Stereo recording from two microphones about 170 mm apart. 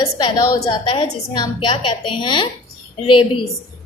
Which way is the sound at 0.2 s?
25° left (ahead or behind).